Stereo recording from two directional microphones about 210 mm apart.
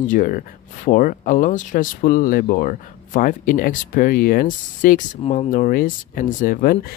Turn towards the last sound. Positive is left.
turn(degrees=45)  # may be behind; listen again after turning